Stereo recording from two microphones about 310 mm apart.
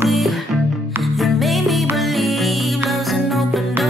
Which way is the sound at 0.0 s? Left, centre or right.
Centre.